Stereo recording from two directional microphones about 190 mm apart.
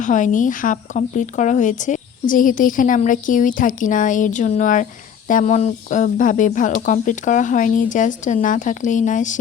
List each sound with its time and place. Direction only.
0.0 s speech: 40° left (ahead or behind)